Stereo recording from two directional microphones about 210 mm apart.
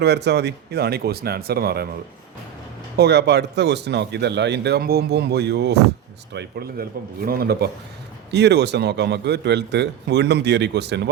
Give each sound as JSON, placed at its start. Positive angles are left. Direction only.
{"t": 0.0, "sound": "a man's voice", "side_deg": -55}
{"t": 3.0, "sound": "a man's voice", "side_deg": -50}